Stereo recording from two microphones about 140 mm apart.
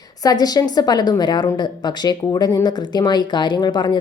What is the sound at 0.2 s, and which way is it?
A woman's voice, 25° left (ahead or behind).